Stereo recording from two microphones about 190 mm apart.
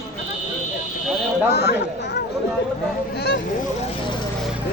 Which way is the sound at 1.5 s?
60° left (ahead or behind).